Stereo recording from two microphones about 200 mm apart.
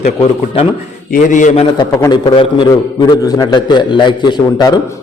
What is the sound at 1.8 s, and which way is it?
A man's voice, 20° left (ahead or behind).